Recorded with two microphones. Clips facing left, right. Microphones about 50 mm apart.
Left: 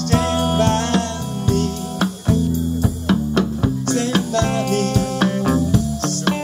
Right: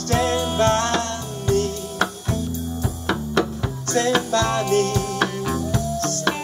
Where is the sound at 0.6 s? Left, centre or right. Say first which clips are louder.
Left 1 dB; right.